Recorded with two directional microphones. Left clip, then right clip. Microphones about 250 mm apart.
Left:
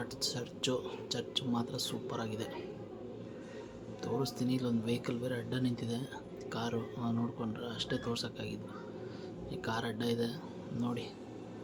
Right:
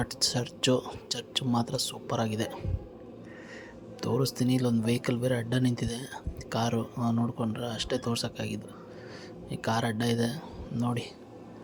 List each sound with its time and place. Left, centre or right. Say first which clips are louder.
0.0 s a man's voice: right 8 dB; right
4.0 s a man's voice: right 7 dB; right